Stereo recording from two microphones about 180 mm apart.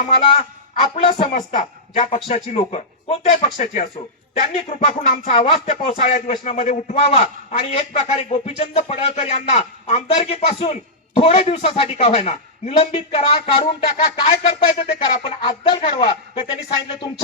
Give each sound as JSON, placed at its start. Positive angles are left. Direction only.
{"t": 0.2, "sound": "a man's voice", "side_deg": 30}
{"t": 1.3, "sound": "a woman's voice", "side_deg": 45}
{"t": 2.0, "sound": "speech", "side_deg": 30}